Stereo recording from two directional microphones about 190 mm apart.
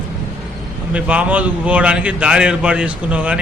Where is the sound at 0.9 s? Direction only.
5° right (ahead or behind).